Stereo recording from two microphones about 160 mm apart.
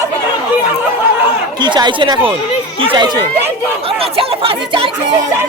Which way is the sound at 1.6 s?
30° right (ahead or behind).